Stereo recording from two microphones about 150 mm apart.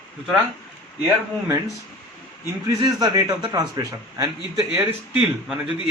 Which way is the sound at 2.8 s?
25° right (ahead or behind).